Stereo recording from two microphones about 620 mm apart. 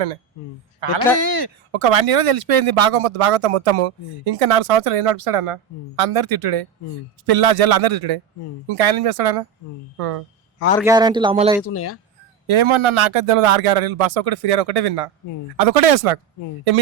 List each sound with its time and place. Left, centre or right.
0.8 s speech: right
1.2 s speech: right
1.7 s speech: right
10.8 s speech: centre
11.7 s speech: left
12.5 s speech: right